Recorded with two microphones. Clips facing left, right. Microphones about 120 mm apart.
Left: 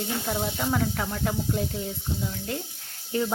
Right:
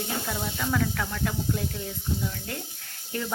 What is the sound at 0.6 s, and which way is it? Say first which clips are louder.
Speech: left 1 dB; 25° left (ahead or behind).